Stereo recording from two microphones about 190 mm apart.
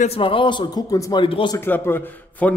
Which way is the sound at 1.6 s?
10° left (ahead or behind).